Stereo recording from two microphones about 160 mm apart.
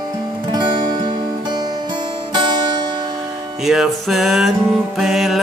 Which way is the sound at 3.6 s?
Centre (ahead or behind).